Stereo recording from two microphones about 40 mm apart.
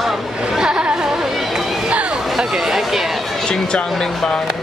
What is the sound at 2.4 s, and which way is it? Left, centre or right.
Chatter, centre.